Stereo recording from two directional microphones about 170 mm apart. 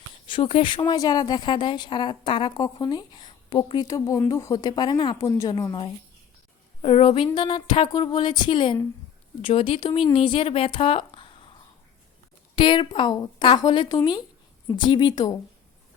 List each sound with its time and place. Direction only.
0.3 s a woman's voice: 30° left (ahead or behind)
12.5 s a woman's voice: 30° left (ahead or behind)